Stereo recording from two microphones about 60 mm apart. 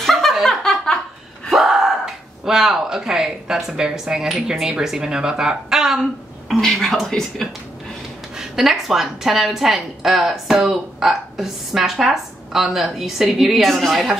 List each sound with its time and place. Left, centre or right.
0.0 s chuckle: centre
1.5 s speech: centre
6.6 s a woman's voice: centre
8.4 s a woman's voice: centre